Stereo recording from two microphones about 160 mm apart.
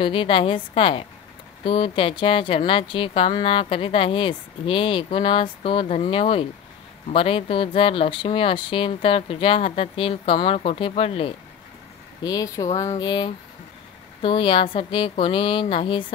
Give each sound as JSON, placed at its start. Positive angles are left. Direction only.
{"t": 0.0, "sound": "speech", "side_deg": 35}
{"t": 12.2, "sound": "speech", "side_deg": 25}